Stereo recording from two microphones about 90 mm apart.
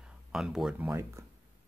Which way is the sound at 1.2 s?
35° right (ahead or behind).